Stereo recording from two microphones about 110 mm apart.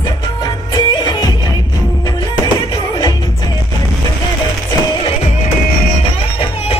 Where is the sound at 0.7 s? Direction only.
40° left (ahead or behind).